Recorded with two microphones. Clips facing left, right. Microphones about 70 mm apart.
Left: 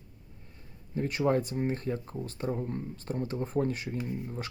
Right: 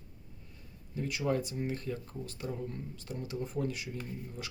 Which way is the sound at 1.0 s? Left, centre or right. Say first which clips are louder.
Left 5 dB; left.